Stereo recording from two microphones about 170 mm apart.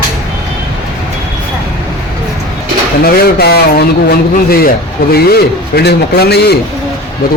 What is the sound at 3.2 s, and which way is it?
A man's voice, 65° left (ahead or behind).